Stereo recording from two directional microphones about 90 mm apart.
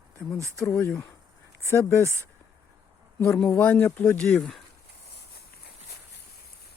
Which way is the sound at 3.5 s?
20° left (ahead or behind).